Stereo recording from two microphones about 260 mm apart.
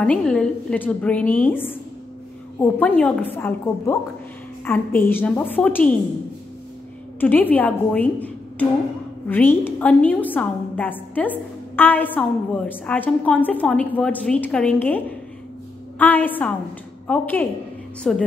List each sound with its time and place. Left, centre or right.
0.0 s a woman's voice: centre
7.2 s a woman's voice: centre